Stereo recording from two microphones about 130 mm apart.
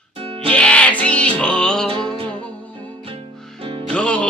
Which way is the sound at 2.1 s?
40° right (ahead or behind).